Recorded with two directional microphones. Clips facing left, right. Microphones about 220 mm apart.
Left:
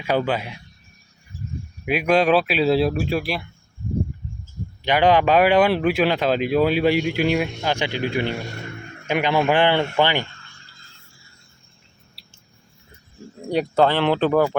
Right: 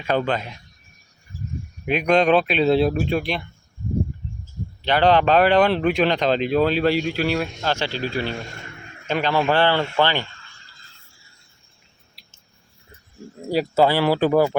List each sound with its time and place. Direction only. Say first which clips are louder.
0.0 s speech: even; 10° left (ahead or behind)
1.8 s speech: even; 5° left (ahead or behind)
4.8 s speech: even; 10° left (ahead or behind)
13.4 s speech: even; 5° right (ahead or behind)